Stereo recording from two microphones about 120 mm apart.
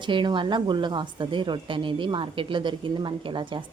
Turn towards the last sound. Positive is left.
turn(degrees=-45)  # may be behind; listen again after turning